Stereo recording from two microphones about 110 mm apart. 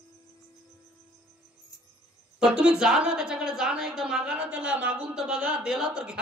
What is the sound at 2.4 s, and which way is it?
A woman's voice, 10° right (ahead or behind).